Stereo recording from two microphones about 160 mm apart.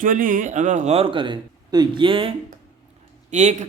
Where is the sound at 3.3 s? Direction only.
45° right (ahead or behind).